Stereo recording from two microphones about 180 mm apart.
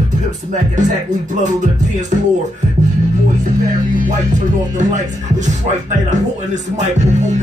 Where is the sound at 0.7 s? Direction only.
45° right (ahead or behind).